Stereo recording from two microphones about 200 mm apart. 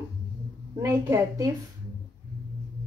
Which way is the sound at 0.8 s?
10° right (ahead or behind).